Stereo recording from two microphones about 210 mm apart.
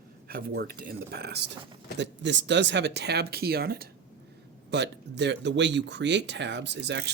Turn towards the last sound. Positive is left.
turn(degrees=-55)  # may be behind; listen again after turning